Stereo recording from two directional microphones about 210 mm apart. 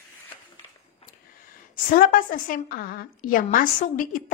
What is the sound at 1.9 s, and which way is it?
A woman's voice, 40° left (ahead or behind).